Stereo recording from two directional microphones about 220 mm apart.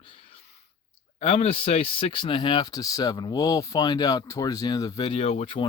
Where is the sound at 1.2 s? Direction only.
25° left (ahead or behind).